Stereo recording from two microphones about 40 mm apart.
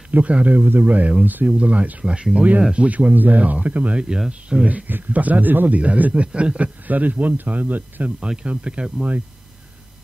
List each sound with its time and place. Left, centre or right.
0.1 s speech: right
0.6 s a man's voice: right
1.6 s speech: right
4.3 s speech: right
4.6 s a man's voice: right
5.8 s a man's voice: right
8.2 s speech: right